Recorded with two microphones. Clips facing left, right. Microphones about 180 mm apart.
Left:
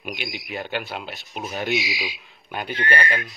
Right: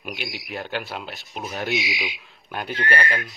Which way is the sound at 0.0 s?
Centre (ahead or behind).